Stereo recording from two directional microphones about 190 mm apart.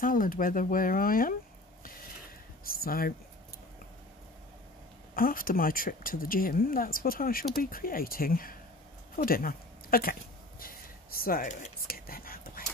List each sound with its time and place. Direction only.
0.0 s speech: 45° left (ahead or behind)
2.6 s speech: 50° left (ahead or behind)
5.1 s speech: 50° left (ahead or behind)
10.6 s whispering: 50° left (ahead or behind)